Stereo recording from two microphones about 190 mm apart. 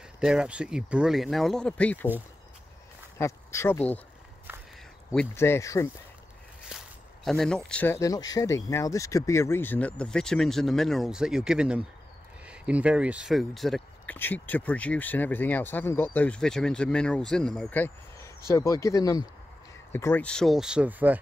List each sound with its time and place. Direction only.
0.2 s speech: 5° right (ahead or behind)
3.2 s speech: 15° left (ahead or behind)
4.5 s walk: 10° right (ahead or behind)
5.1 s speech: 10° left (ahead or behind)
6.7 s a sound: 5° right (ahead or behind)
7.2 s speech: centre (ahead or behind)